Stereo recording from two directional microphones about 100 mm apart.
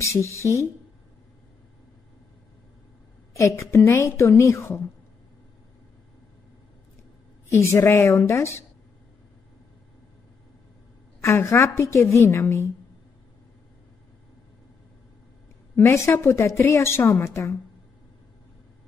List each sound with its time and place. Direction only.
0.0 s a sound: 30° left (ahead or behind)
0.4 s speech: 30° left (ahead or behind)
3.3 s a woman's voice: 30° left (ahead or behind)
7.4 s a woman's voice: 30° left (ahead or behind)
11.1 s a woman's voice: 30° left (ahead or behind)
15.7 s a woman's voice: 30° left (ahead or behind)